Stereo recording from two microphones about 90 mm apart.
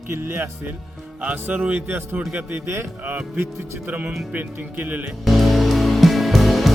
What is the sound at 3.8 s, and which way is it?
A man's voice, 20° right (ahead or behind).